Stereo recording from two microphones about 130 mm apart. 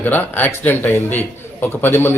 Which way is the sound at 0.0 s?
15° left (ahead or behind).